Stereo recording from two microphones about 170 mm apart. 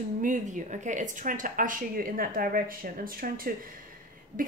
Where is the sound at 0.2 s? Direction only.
50° right (ahead or behind).